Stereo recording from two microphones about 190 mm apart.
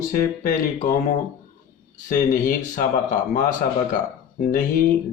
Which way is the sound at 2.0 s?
45° left (ahead or behind).